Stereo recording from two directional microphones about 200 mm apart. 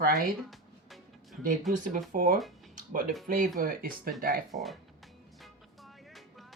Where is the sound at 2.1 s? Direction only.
45° right (ahead or behind).